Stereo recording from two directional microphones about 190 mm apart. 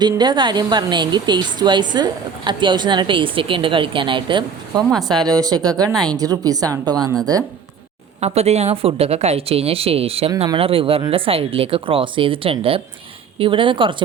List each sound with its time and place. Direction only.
0.0 s a woman's voice: 25° right (ahead or behind)
5.9 s a woman's voice: centre (ahead or behind)
6.1 s a woman's voice: 20° right (ahead or behind)
8.2 s a woman's voice: 35° right (ahead or behind)